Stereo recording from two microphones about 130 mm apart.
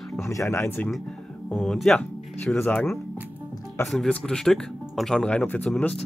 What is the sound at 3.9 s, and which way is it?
Speech, 5° left (ahead or behind).